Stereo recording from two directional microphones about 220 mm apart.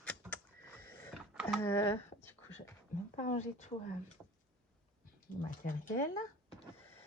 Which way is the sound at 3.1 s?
30° left (ahead or behind).